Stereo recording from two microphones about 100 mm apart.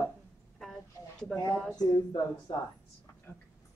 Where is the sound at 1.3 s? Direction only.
5° left (ahead or behind).